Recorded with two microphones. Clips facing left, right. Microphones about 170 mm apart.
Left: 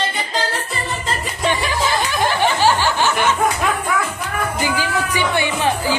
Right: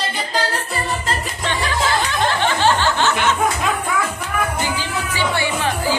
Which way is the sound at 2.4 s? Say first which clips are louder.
Left 2 dB; 10° left (ahead or behind).